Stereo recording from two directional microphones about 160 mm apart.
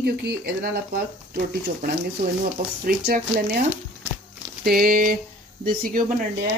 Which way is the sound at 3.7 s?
15° right (ahead or behind).